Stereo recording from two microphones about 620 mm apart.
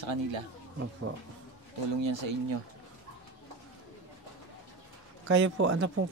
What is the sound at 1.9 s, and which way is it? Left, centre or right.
Speech, right.